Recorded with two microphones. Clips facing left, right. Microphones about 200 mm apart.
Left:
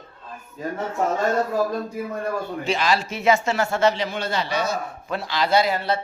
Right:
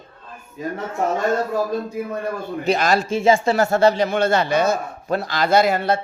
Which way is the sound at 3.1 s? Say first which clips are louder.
Right 4 dB; 30° right (ahead or behind).